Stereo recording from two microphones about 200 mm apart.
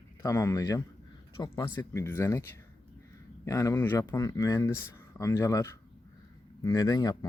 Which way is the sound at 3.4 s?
15° left (ahead or behind).